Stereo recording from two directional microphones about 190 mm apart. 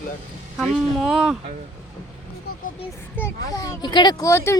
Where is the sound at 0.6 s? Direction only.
5° left (ahead or behind).